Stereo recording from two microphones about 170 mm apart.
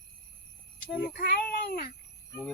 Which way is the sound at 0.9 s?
55° left (ahead or behind).